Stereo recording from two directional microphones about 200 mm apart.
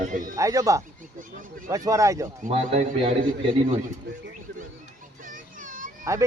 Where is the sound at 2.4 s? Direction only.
30° right (ahead or behind).